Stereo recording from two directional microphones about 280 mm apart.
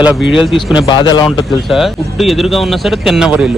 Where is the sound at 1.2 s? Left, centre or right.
Centre.